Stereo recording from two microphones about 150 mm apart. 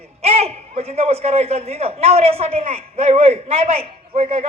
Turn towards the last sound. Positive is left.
turn(degrees=-40)  # may be behind; listen again after turning